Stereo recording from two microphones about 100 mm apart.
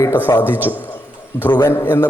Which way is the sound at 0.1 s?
20° left (ahead or behind).